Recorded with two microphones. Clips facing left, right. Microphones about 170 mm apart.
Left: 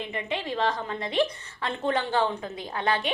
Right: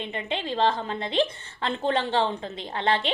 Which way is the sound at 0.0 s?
25° right (ahead or behind).